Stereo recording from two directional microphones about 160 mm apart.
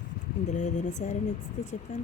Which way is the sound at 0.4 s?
50° left (ahead or behind).